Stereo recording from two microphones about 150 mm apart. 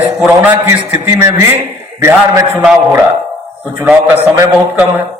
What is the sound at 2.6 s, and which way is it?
A man's voice, 5° right (ahead or behind).